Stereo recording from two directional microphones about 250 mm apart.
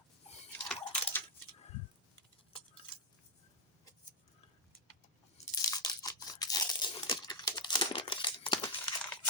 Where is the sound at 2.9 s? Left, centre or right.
Centre.